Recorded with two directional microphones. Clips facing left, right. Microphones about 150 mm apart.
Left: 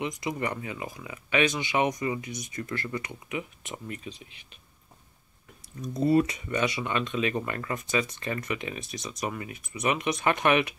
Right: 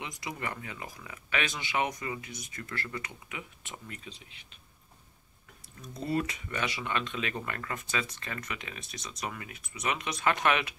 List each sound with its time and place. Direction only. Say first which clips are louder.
0.0 s speech: left 7 dB; 20° left (ahead or behind)
5.8 s speech: left 9 dB; 20° left (ahead or behind)